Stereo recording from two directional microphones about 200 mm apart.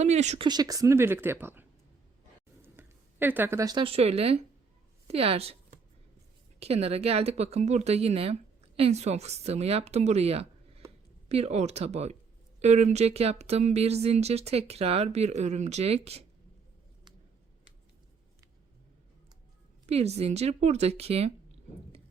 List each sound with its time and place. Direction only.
0.0 s speech: 35° right (ahead or behind)
0.4 s a woman's voice: 20° right (ahead or behind)
6.6 s speech: 30° right (ahead or behind)
19.9 s speech: 30° right (ahead or behind)